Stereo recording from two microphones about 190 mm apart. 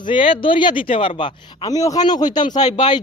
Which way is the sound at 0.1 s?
30° left (ahead or behind).